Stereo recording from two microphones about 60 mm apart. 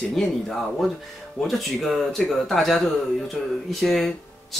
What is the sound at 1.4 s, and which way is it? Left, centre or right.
Speech, centre.